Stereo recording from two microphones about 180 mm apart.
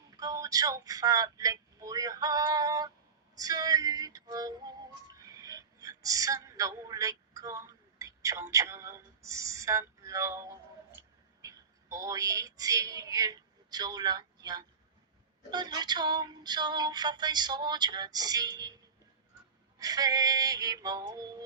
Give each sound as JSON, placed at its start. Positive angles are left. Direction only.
{"t": 0.2, "sound": "speech", "side_deg": -20}
{"t": 3.3, "sound": "music", "side_deg": -20}
{"t": 5.2, "sound": "speech", "side_deg": -20}
{"t": 11.4, "sound": "a woman's voice", "side_deg": -20}
{"t": 15.4, "sound": "a sound", "side_deg": -25}
{"t": 19.8, "sound": "a sound", "side_deg": -20}